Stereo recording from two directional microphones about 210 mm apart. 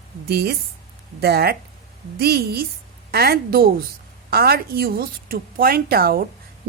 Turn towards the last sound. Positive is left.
turn(degrees=-45)  # may be behind; listen again after turning